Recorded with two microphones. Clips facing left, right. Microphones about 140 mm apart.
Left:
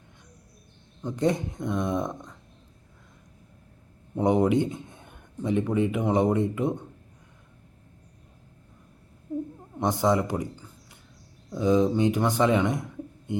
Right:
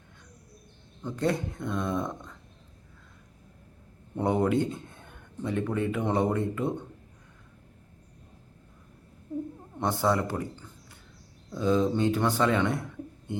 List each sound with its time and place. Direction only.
1.0 s speech: 20° left (ahead or behind)
4.1 s speech: 15° left (ahead or behind)
9.7 s speech: 15° left (ahead or behind)